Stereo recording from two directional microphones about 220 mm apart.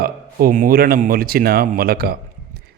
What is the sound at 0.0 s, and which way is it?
A man's voice, 40° right (ahead or behind).